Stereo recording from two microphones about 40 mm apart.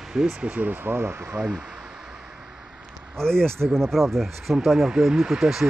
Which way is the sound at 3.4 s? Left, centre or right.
Right.